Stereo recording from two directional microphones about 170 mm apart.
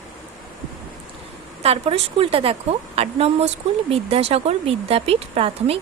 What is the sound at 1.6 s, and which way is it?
A woman's voice, 35° right (ahead or behind).